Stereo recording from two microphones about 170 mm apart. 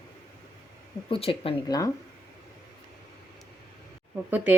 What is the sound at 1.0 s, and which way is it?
Speech, 30° left (ahead or behind).